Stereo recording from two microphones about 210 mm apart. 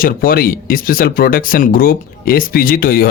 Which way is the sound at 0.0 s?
45° left (ahead or behind).